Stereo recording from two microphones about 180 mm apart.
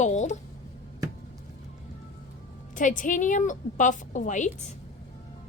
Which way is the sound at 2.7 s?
45° left (ahead or behind).